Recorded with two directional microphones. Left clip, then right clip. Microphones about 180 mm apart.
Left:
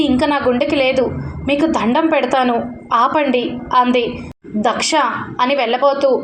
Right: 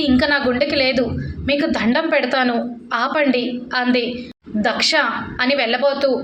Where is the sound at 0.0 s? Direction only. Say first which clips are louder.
Left 2 dB; 20° left (ahead or behind).